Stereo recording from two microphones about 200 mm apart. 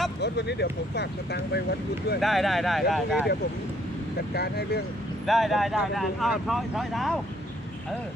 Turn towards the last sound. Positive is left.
turn(degrees=0)  # may be behind; listen again after turning